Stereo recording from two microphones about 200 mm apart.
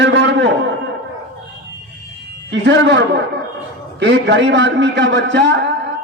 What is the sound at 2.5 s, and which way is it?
A man's voice, 65° right (ahead or behind).